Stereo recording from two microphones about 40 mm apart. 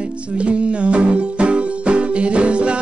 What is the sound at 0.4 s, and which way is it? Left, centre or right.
Music, right.